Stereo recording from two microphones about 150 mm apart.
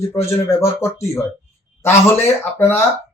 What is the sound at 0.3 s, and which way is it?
Speech, 20° left (ahead or behind).